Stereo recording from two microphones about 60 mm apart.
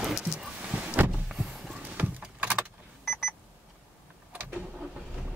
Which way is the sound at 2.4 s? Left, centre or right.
Right.